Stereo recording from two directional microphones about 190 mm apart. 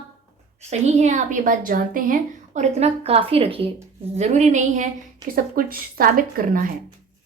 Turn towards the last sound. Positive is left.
turn(degrees=-50)  # may be behind; listen again after turning